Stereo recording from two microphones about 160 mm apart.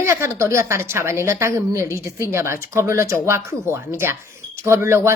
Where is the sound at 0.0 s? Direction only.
15° right (ahead or behind).